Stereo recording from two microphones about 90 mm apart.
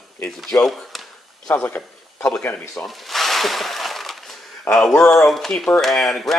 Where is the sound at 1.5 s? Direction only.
25° left (ahead or behind).